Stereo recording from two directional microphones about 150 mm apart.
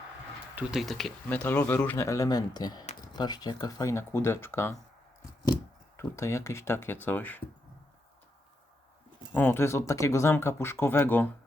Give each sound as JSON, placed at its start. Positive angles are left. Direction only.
{"t": 0.5, "sound": "speech", "side_deg": -5}
{"t": 1.5, "sound": "speech", "side_deg": 15}
{"t": 6.0, "sound": "speech", "side_deg": 20}
{"t": 9.3, "sound": "speech", "side_deg": 15}